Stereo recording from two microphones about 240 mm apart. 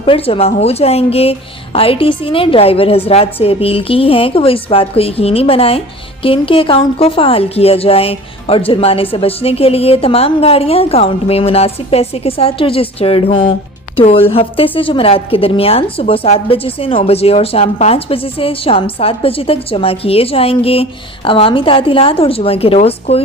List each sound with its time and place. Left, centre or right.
0.0 s a woman's voice: left